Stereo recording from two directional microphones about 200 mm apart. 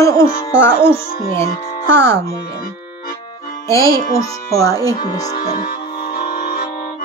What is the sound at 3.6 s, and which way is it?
Speech, 15° left (ahead or behind).